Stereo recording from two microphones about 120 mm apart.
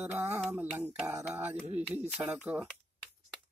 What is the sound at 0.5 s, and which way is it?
Speech, 15° right (ahead or behind).